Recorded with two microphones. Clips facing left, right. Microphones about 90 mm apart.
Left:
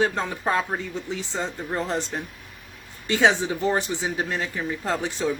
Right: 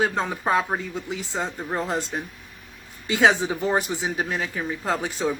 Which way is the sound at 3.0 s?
20° right (ahead or behind).